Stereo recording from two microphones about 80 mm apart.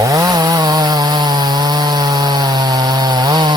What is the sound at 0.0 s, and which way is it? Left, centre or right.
Chainsaw, right.